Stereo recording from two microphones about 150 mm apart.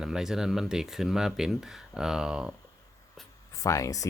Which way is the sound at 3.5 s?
20° left (ahead or behind).